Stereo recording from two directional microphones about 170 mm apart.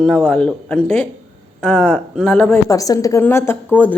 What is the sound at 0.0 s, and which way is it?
Speech, 5° left (ahead or behind).